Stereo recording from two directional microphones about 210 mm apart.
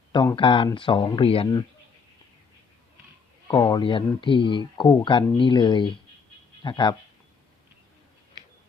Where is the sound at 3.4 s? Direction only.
20° left (ahead or behind).